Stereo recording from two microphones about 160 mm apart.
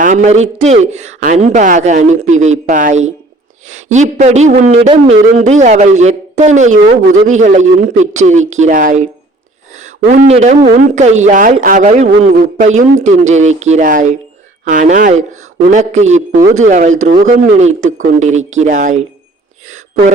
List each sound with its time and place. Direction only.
0.0 s a man's voice: 50° right (ahead or behind)